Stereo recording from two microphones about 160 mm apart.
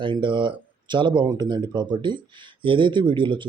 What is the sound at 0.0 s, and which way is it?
Speech, 30° right (ahead or behind).